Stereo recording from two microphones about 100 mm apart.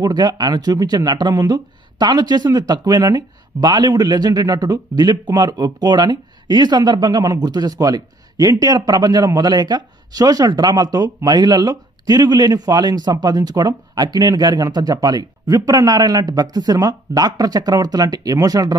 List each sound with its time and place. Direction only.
0.0 s speech: 40° right (ahead or behind)